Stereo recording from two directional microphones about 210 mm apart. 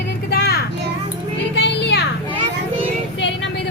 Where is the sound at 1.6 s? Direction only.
55° left (ahead or behind).